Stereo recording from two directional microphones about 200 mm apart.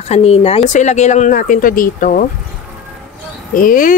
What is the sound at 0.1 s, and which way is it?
A woman's voice, 30° left (ahead or behind).